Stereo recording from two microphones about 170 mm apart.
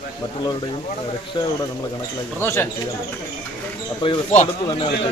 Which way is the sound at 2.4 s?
15° left (ahead or behind).